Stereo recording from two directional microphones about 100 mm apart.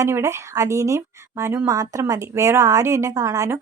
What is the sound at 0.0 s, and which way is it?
Speech, 30° right (ahead or behind).